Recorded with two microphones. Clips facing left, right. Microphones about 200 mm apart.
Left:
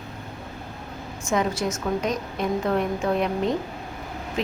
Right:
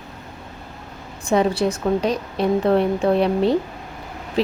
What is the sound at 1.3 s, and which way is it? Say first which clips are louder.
A woman's voice: right 6 dB; 30° right (ahead or behind).